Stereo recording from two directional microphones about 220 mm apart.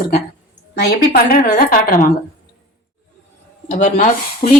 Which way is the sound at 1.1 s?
45° left (ahead or behind).